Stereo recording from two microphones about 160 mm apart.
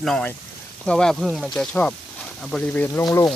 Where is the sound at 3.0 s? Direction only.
25° left (ahead or behind).